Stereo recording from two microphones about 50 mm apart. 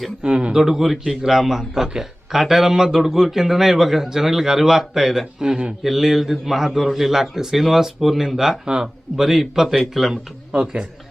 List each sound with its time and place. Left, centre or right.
0.2 s a man's voice: centre
0.5 s a man's voice: centre
5.8 s a man's voice: centre